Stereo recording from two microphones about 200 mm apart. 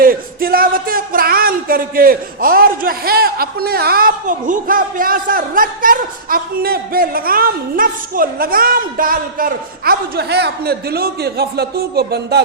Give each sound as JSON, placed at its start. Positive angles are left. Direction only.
{"t": 0.0, "sound": "speech", "side_deg": -45}